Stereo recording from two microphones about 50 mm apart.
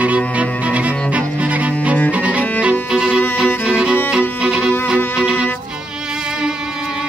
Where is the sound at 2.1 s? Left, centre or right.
Right.